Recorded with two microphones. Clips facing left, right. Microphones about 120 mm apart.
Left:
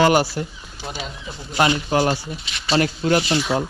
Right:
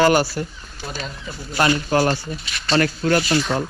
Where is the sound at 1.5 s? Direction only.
20° left (ahead or behind).